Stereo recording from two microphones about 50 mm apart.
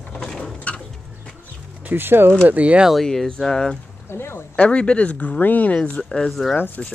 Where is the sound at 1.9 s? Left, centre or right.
Right.